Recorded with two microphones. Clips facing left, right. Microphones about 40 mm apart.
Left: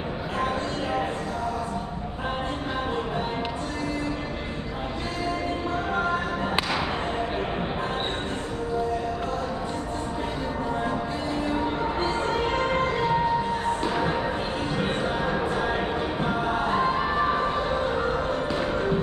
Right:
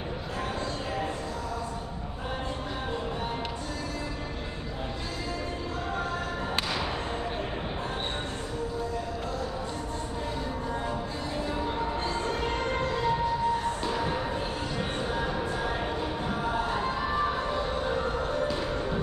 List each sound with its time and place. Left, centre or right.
11.4 s music: left